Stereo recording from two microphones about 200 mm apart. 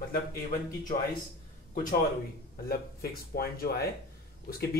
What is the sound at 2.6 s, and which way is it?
Speech, 50° left (ahead or behind).